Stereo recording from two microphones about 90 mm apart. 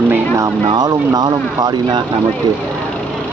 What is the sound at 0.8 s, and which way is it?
Speech, 50° right (ahead or behind).